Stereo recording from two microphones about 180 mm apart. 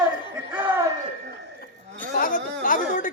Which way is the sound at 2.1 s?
50° left (ahead or behind).